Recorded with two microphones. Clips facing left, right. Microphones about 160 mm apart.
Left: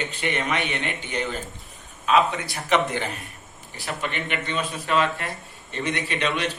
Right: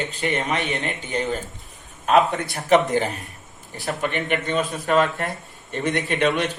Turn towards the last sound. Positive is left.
turn(degrees=-50)  # may be behind; listen again after turning